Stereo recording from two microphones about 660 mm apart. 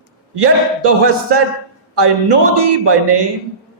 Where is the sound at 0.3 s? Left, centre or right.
Right.